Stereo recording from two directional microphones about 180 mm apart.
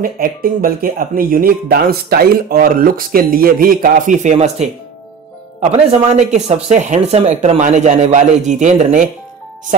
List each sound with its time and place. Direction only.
0.0 s speech: 55° right (ahead or behind)